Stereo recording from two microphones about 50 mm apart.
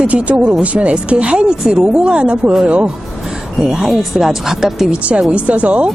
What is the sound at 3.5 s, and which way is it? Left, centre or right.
Speech, centre.